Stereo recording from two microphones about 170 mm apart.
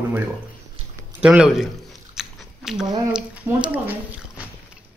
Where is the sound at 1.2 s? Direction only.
5° right (ahead or behind).